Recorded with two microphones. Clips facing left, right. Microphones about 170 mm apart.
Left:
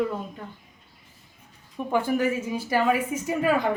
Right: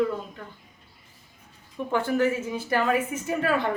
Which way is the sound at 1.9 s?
10° left (ahead or behind).